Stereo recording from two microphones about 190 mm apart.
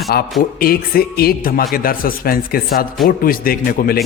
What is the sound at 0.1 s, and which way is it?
A man's voice, 55° left (ahead or behind).